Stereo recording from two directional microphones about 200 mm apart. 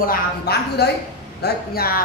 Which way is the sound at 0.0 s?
50° left (ahead or behind).